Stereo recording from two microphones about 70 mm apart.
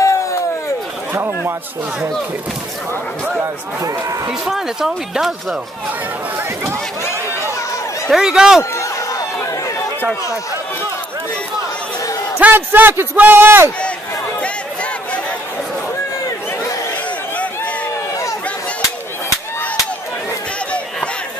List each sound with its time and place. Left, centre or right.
0.0 s a sound: left
1.1 s speech: right
4.3 s speech: centre
8.1 s speech: centre
8.7 s chatter: left
12.4 s a man's voice: right